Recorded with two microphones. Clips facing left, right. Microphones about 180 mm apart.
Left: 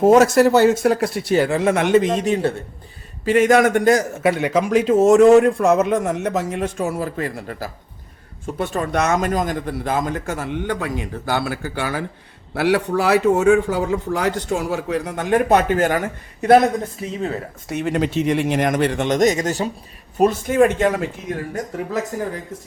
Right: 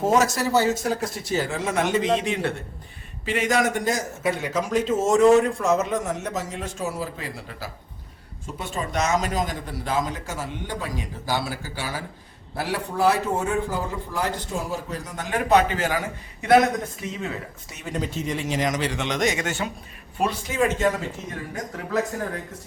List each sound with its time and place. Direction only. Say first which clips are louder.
0.0 s a man's voice: left 9 dB; 55° left (ahead or behind)
2.1 s speech: left 5 dB; 40° left (ahead or behind)
3.2 s a man's voice: left 8 dB; 50° left (ahead or behind)
8.5 s a man's voice: left 6 dB; 60° left (ahead or behind)
12.5 s speech: left 8 dB; 75° left (ahead or behind); by 16.0 s 55° left (ahead or behind)
17.0 s speech: left 6 dB; 35° left (ahead or behind)
17.7 s a man's voice: left 10 dB; 65° left (ahead or behind)